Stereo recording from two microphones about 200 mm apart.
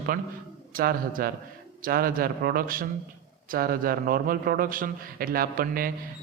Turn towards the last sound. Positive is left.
turn(degrees=-45)  # may be behind; listen again after turning